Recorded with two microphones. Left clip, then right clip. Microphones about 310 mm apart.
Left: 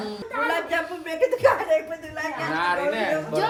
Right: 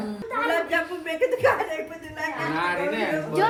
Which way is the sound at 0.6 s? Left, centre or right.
Centre.